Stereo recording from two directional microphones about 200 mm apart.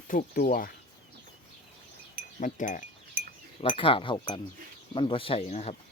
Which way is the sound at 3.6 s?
25° left (ahead or behind).